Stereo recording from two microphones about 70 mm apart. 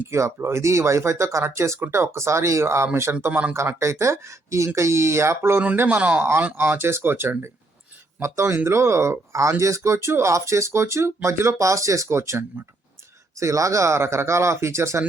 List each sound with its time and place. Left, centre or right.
0.1 s speech: right
6.0 s speech: centre
6.6 s speech: right